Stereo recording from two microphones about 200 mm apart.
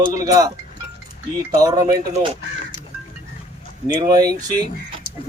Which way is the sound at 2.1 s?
30° right (ahead or behind).